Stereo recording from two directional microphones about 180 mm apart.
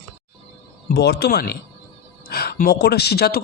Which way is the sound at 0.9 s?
65° left (ahead or behind).